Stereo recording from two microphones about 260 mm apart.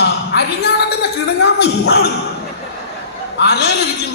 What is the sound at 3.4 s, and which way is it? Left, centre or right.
Speech, left.